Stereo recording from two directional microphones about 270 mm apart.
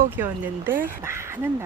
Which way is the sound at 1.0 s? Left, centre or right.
Centre.